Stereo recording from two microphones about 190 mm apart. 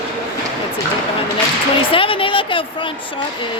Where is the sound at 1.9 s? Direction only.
30° left (ahead or behind).